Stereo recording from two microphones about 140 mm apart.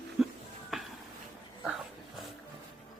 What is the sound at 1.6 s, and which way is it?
Dog, centre (ahead or behind).